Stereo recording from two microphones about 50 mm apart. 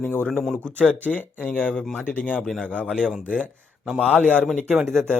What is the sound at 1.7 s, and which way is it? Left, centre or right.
Speech, centre.